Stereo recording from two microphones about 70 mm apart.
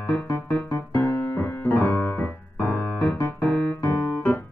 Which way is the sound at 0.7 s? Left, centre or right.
Left.